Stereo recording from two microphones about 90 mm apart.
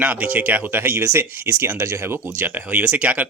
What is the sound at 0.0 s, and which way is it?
Speech, 15° right (ahead or behind).